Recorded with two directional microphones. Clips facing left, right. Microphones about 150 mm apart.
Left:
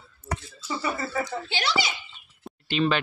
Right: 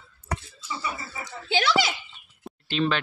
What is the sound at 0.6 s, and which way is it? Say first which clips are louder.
Speech: left 4 dB; 55° left (ahead or behind).